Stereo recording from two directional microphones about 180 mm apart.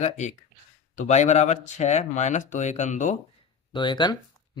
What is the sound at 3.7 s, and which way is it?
Speech, 25° left (ahead or behind).